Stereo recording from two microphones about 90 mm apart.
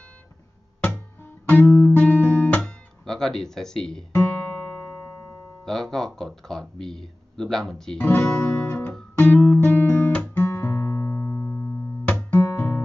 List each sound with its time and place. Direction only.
1.5 s guitar: 20° left (ahead or behind)
4.1 s music: 20° left (ahead or behind)
5.7 s speech: 5° left (ahead or behind)
8.0 s guitar: 25° left (ahead or behind)
12.3 s music: 20° left (ahead or behind)